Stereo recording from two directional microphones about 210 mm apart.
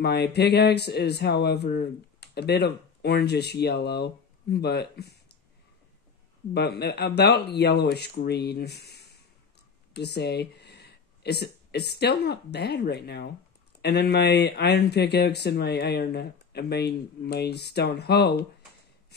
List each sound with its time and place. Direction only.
0.0 s speech: 50° left (ahead or behind)
6.5 s speech: 50° left (ahead or behind)